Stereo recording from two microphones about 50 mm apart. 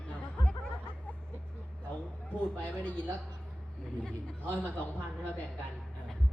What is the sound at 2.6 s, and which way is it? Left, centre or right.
Speech, left.